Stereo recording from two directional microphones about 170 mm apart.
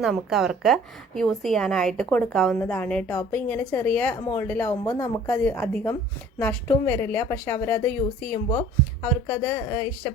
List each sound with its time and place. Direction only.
0.0 s a woman's voice: centre (ahead or behind)
4.8 s speech: 20° left (ahead or behind)
5.3 s a woman's voice: 10° left (ahead or behind)